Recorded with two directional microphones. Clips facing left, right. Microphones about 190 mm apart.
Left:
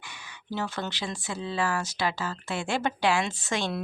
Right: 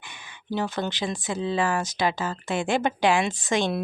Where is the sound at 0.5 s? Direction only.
15° right (ahead or behind).